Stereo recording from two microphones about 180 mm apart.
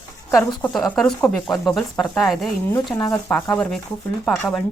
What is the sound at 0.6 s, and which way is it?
Speech, 5° left (ahead or behind).